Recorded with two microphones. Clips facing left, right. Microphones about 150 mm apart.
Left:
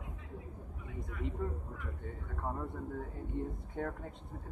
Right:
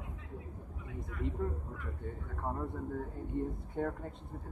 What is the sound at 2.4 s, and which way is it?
Speech, 5° right (ahead or behind).